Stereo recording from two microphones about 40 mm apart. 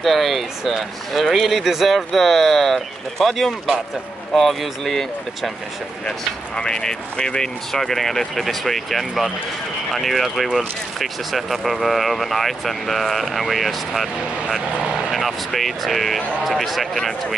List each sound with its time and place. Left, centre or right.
0.0 s speech: centre
6.0 s speech: left
7.8 s speech: centre